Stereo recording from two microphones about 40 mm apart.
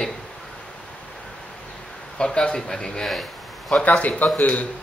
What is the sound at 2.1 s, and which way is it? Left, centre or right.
Speech, left.